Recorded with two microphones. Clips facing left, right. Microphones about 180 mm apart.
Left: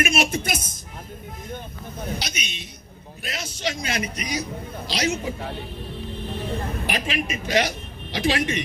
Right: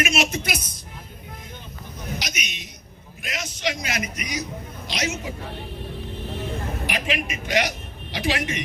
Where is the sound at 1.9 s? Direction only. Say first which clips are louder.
Left 2 dB; 30° left (ahead or behind).